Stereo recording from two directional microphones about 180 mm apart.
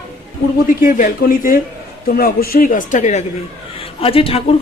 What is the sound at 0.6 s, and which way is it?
Speech, 50° left (ahead or behind).